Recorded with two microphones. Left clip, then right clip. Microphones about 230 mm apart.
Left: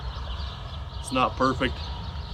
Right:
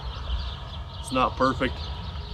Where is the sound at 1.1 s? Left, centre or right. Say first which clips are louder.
Even; centre.